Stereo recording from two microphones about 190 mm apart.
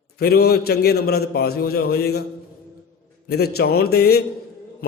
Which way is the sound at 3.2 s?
55° left (ahead or behind).